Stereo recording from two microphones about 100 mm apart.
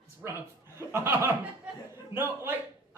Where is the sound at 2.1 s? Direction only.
25° right (ahead or behind).